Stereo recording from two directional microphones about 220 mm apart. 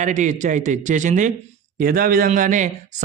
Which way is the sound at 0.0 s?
35° right (ahead or behind).